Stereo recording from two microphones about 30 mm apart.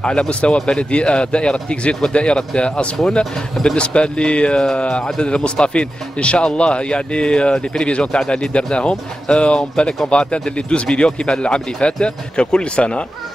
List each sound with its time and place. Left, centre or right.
0.0 s speech: left